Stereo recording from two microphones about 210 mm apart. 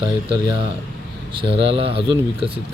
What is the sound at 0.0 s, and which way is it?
Speech, 20° right (ahead or behind).